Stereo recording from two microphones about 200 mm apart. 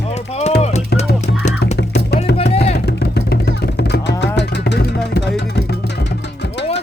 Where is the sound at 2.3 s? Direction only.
30° left (ahead or behind).